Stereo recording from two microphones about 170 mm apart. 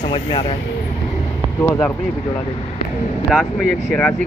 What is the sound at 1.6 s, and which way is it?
Speech, 10° left (ahead or behind).